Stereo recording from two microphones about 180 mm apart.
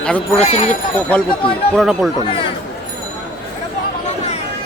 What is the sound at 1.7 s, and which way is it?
Speech, centre (ahead or behind).